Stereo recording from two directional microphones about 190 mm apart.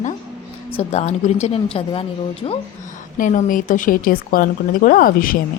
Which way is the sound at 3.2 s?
45° left (ahead or behind).